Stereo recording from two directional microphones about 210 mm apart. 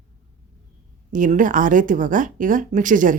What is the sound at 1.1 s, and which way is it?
Speech, 40° right (ahead or behind).